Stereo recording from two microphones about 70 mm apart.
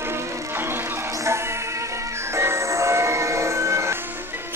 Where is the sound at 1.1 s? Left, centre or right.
Right.